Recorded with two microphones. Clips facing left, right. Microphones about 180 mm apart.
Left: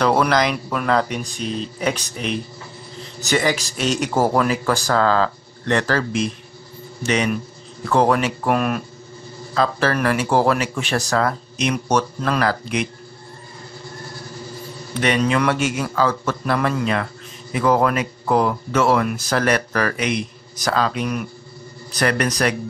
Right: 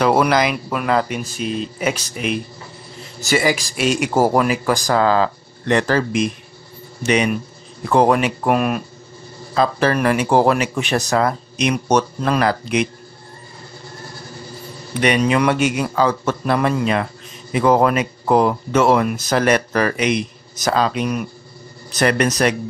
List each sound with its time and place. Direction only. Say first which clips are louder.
0.0 s speech: right 2 dB; 10° right (ahead or behind)
15.0 s a man's voice: right 2 dB; 15° right (ahead or behind)